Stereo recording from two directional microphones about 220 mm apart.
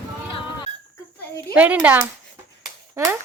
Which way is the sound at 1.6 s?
5° right (ahead or behind).